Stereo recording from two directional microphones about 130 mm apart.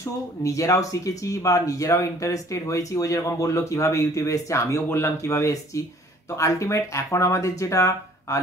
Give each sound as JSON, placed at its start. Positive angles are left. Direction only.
{"t": 0.0, "sound": "speech", "side_deg": 25}